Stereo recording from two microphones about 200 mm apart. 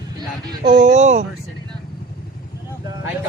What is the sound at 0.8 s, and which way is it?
Speech, 35° right (ahead or behind).